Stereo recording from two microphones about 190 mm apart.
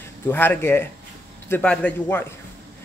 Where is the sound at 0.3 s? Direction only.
10° left (ahead or behind).